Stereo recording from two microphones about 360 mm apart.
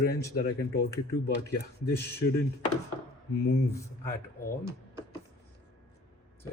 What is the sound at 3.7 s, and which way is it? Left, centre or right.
Speech, centre.